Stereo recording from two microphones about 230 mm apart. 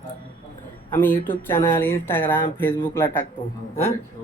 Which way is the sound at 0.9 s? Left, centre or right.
Centre.